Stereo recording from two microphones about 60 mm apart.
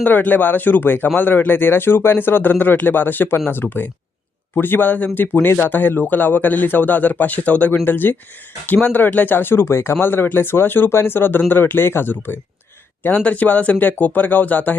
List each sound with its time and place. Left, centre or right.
0.0 s speech: left